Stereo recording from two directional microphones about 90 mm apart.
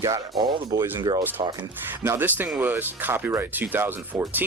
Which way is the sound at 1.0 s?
60° right (ahead or behind).